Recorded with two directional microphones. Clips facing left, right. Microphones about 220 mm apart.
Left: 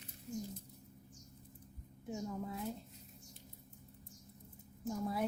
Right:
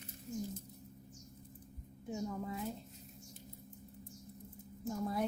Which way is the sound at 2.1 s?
Centre (ahead or behind).